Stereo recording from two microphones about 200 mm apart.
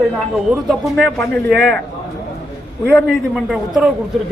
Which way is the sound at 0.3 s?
Centre (ahead or behind).